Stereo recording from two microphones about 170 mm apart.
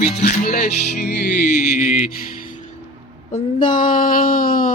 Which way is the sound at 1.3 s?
50° left (ahead or behind).